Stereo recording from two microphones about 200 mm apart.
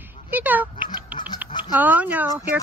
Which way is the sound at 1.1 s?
25° left (ahead or behind).